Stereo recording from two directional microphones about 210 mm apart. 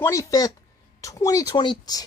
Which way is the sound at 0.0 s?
15° left (ahead or behind).